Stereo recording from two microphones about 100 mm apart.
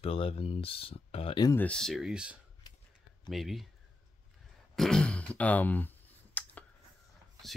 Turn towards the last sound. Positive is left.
turn(degrees=15)  # may be behind; listen again after turning